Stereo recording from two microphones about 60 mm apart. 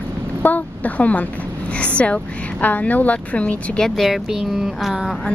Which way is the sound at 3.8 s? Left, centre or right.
Centre.